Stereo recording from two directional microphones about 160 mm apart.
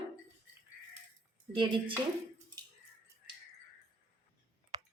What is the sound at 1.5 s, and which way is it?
Speech, 30° right (ahead or behind).